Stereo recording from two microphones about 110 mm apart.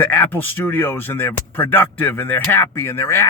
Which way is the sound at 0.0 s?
20° left (ahead or behind).